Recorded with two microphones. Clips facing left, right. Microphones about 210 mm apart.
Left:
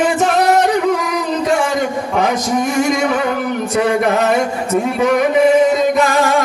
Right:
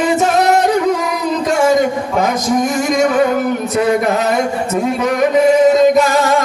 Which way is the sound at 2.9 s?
50° right (ahead or behind).